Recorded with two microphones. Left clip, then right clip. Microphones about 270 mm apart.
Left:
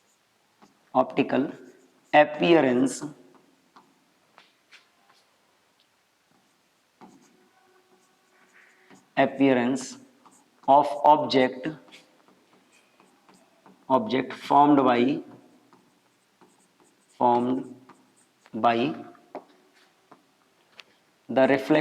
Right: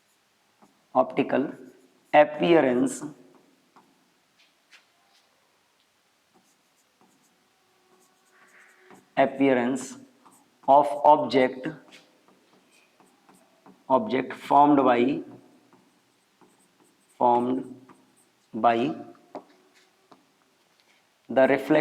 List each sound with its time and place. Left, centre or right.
0.6 s a sound: left
8.9 s a man's voice: left
13.7 s a man's voice: left
17.2 s speech: left
18.5 s a sound: left
21.2 s a man's voice: left